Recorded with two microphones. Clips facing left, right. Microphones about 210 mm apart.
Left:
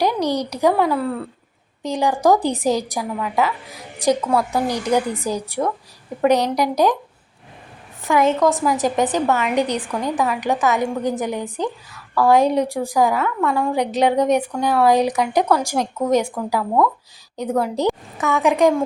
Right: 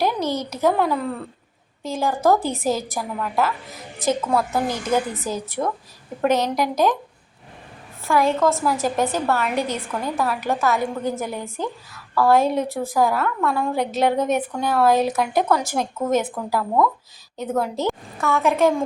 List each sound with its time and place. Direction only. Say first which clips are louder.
0.0 s a woman's voice: left 3 dB; 15° left (ahead or behind)
8.0 s a woman's voice: left 2 dB; 20° left (ahead or behind)